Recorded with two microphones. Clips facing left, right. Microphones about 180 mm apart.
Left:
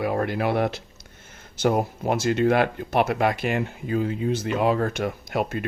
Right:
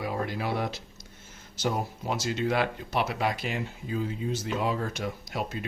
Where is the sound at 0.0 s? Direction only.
60° left (ahead or behind).